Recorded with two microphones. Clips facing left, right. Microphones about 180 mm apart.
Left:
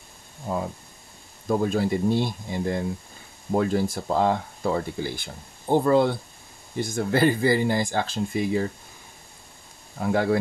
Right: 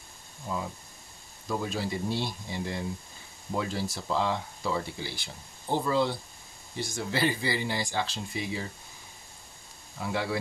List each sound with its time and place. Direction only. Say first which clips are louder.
0.5 s speech: left 6 dB; 55° left (ahead or behind)
9.9 s speech: left 8 dB; 50° left (ahead or behind)